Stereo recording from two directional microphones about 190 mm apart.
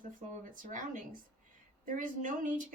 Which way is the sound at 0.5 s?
45° right (ahead or behind).